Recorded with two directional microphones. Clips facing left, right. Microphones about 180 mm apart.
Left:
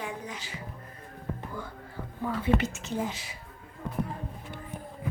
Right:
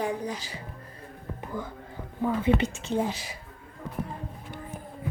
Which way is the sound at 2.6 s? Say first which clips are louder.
Right 4 dB; 30° right (ahead or behind).